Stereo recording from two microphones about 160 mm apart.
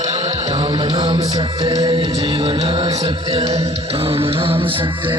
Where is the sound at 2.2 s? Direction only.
35° right (ahead or behind).